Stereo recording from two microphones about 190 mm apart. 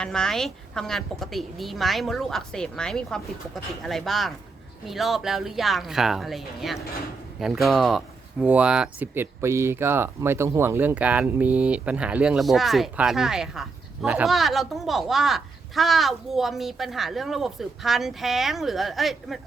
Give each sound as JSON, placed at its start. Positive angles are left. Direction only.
{"t": 0.0, "sound": "speech", "side_deg": 5}